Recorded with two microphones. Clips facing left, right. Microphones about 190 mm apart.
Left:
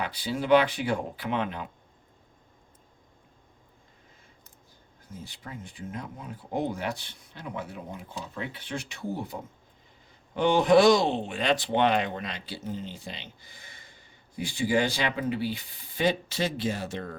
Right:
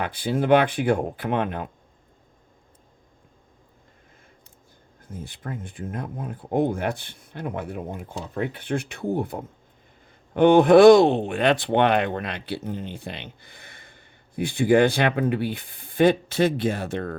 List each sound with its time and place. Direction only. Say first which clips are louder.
0.0 s speech: right 6 dB; 50° right (ahead or behind)
5.1 s speech: right 7 dB; 55° right (ahead or behind)